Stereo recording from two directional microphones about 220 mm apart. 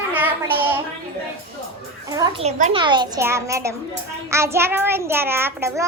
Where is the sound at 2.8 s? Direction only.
20° right (ahead or behind).